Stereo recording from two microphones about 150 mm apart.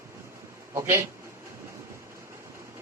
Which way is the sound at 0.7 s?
20° right (ahead or behind).